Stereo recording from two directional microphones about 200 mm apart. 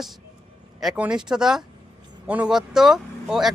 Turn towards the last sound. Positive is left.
turn(degrees=0)  # may be behind; listen again after turning